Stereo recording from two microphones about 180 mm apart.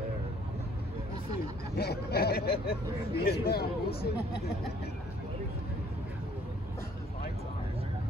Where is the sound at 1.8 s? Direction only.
60° left (ahead or behind).